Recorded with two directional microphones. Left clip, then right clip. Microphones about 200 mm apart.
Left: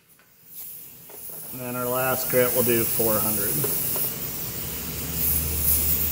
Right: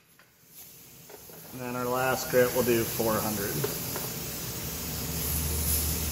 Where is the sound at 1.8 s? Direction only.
25° left (ahead or behind).